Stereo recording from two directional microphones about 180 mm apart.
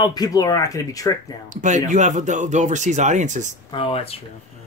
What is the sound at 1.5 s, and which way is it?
Speech, 45° right (ahead or behind).